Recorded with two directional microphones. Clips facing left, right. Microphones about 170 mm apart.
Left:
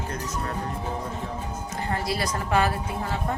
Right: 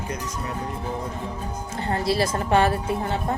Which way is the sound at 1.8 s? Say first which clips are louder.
Right 5 dB; 25° right (ahead or behind).